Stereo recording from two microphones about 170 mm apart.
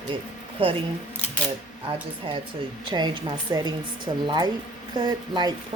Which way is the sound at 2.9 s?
25° right (ahead or behind).